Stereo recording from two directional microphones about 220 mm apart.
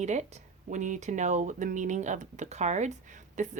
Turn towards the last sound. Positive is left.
turn(degrees=-35)  # may be behind; listen again after turning